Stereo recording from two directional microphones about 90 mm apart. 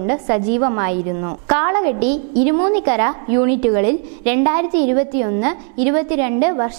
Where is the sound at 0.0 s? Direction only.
15° right (ahead or behind).